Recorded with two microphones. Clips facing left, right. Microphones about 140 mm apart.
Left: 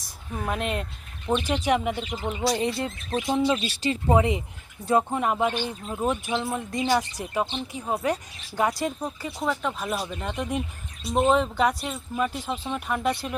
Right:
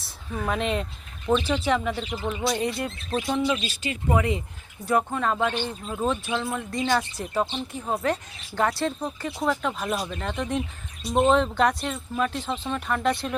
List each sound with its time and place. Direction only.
0.0 s speech: 10° left (ahead or behind)
1.5 s speech: 15° left (ahead or behind)
9.4 s speech: centre (ahead or behind)